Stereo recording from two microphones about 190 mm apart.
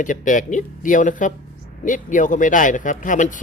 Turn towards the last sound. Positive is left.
turn(degrees=45)  # may be behind; listen again after turning